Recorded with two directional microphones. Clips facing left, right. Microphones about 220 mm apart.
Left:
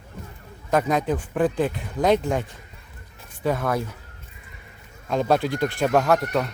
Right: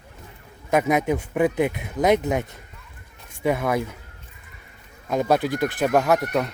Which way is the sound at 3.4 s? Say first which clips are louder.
Right 2 dB; 10° right (ahead or behind).